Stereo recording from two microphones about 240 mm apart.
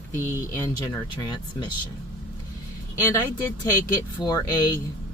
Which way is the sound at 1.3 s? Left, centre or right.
Centre.